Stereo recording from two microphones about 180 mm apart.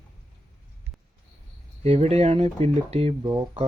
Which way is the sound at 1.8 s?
35° right (ahead or behind).